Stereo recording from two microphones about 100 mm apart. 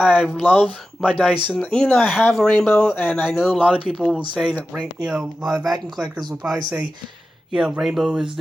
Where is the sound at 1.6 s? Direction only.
10° left (ahead or behind).